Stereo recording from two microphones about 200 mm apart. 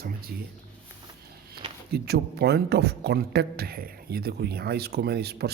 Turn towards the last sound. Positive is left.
turn(degrees=-55)  # may be behind; listen again after turning